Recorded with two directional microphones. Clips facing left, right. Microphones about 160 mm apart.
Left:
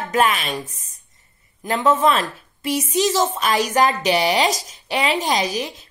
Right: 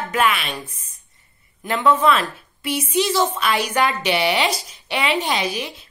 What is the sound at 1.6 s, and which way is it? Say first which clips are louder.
A woman's voice: even; 40° left (ahead or behind).